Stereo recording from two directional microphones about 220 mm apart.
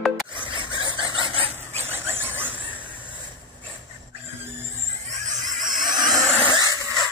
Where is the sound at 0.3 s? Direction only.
20° right (ahead or behind).